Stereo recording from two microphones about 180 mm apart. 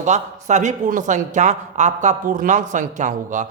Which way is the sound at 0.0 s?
40° right (ahead or behind).